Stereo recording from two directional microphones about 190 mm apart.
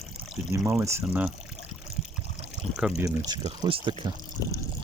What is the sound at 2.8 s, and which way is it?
Speech, 5° right (ahead or behind).